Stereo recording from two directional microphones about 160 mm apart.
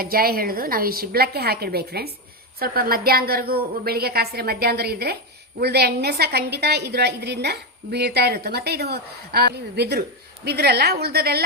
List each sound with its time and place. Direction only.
0.0 s a woman's voice: 70° right (ahead or behind)